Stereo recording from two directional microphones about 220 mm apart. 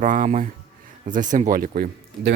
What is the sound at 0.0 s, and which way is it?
Speech, 35° right (ahead or behind).